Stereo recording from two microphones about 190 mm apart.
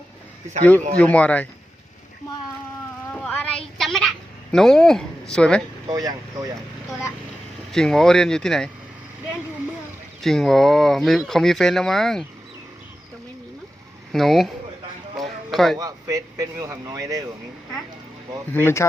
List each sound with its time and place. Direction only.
0.9 s speech: 5° left (ahead or behind)
3.1 s a sound: 5° left (ahead or behind)
4.5 s speech: centre (ahead or behind)
5.9 s speech: 20° right (ahead or behind)
7.7 s speech: centre (ahead or behind)
10.2 s speech: centre (ahead or behind)
14.1 s speech: centre (ahead or behind)
15.2 s a sound: centre (ahead or behind)
15.8 s speech: 20° right (ahead or behind)
18.5 s speech: 15° left (ahead or behind)